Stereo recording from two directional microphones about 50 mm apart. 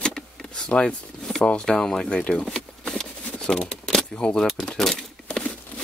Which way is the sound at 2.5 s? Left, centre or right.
Centre.